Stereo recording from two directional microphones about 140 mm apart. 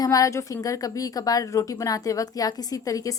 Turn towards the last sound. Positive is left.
turn(degrees=25)  # may be behind; listen again after turning